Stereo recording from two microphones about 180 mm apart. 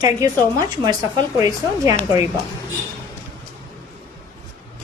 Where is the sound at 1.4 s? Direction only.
20° right (ahead or behind).